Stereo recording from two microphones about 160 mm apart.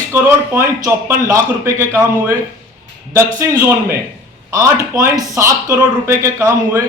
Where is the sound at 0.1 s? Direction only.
15° right (ahead or behind).